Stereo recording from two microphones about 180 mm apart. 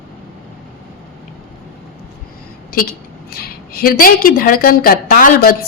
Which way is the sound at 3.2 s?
55° left (ahead or behind).